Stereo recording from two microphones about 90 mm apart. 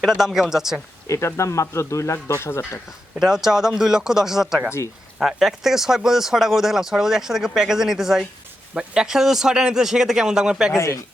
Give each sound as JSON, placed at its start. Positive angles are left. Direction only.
{"t": 0.3, "sound": "speech", "side_deg": -5}
{"t": 1.0, "sound": "speech", "side_deg": 35}
{"t": 3.2, "sound": "a man's voice", "side_deg": -5}
{"t": 10.7, "sound": "speech", "side_deg": 35}